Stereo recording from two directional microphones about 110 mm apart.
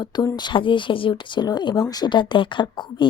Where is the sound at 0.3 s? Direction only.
45° left (ahead or behind).